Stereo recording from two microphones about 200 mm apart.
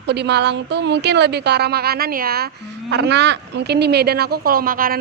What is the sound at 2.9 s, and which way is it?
A woman's voice, 60° right (ahead or behind).